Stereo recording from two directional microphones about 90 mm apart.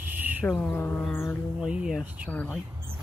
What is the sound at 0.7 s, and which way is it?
Mantra, 20° left (ahead or behind).